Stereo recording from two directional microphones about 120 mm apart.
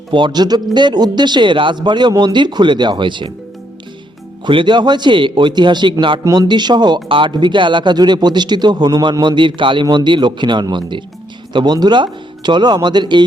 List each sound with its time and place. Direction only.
0.1 s speech: 40° right (ahead or behind)
4.4 s speech: 40° right (ahead or behind)